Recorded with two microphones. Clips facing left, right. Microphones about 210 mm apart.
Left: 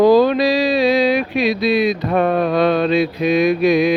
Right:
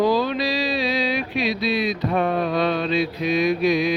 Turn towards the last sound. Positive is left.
turn(degrees=55)  # may be behind; listen again after turning